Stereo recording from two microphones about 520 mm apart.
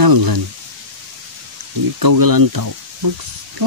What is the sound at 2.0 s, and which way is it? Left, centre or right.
Speech, right.